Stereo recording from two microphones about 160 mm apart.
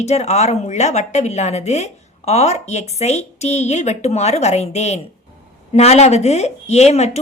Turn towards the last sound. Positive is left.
turn(degrees=45)  # may be behind; listen again after turning